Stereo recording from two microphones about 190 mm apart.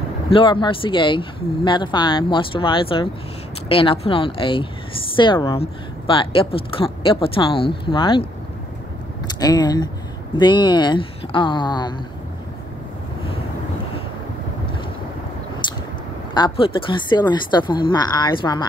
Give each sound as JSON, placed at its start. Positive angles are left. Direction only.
{"t": 0.3, "sound": "speech", "side_deg": 25}
{"t": 9.4, "sound": "speech", "side_deg": 20}
{"t": 16.3, "sound": "speech", "side_deg": 25}